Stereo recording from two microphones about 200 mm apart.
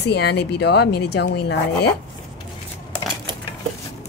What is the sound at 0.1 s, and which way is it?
Speech, 55° left (ahead or behind).